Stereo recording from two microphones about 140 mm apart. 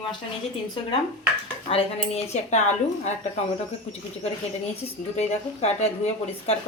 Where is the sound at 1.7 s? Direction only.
45° left (ahead or behind).